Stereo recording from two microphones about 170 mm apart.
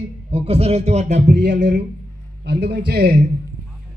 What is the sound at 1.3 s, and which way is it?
A man's voice, 90° right.